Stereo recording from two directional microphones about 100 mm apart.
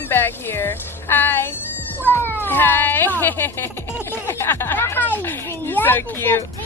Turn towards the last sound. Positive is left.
turn(degrees=25)  # may be behind; listen again after turning